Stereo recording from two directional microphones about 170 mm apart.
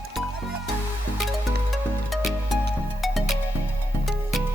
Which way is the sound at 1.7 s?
Centre (ahead or behind).